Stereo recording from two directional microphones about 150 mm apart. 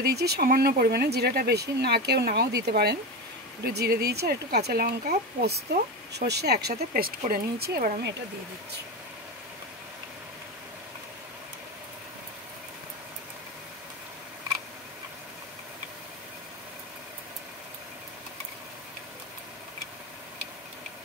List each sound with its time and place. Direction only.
0.1 s speech: 90° right